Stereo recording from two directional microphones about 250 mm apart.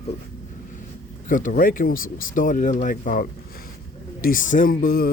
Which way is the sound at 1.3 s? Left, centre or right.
Left.